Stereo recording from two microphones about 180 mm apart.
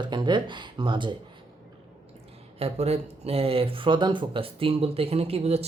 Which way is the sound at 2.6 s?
35° right (ahead or behind).